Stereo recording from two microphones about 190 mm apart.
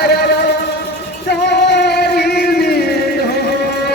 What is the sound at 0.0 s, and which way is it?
Music, 55° left (ahead or behind).